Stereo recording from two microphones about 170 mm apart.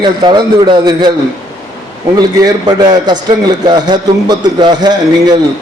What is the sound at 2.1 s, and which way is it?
A man's voice, 25° right (ahead or behind).